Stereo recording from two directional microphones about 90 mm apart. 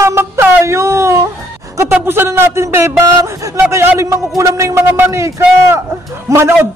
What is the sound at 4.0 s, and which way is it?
Speech, 35° right (ahead or behind).